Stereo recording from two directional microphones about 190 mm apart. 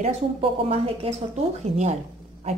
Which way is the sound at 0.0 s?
30° right (ahead or behind).